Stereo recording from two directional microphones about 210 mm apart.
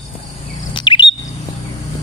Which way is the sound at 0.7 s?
20° left (ahead or behind).